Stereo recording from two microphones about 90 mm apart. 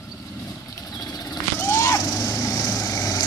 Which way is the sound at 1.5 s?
30° left (ahead or behind).